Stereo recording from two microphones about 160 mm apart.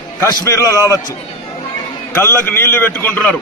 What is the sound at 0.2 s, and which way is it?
Speech, 20° left (ahead or behind).